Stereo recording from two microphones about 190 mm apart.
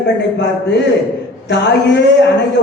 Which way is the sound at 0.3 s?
65° left (ahead or behind).